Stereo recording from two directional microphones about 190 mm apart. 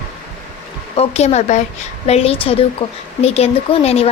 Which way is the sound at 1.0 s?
35° left (ahead or behind).